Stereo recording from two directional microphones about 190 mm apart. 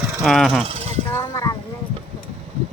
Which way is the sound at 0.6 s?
30° right (ahead or behind).